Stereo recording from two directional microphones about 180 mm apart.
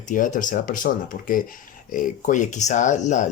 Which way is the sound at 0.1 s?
45° left (ahead or behind).